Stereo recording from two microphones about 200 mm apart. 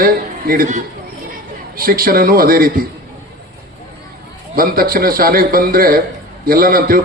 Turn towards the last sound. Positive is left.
turn(degrees=-45)  # may be behind; listen again after turning